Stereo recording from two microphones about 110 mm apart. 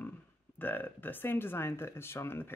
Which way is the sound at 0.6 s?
15° left (ahead or behind).